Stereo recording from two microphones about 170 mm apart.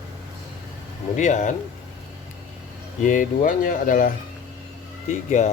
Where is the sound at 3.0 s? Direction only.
50° left (ahead or behind).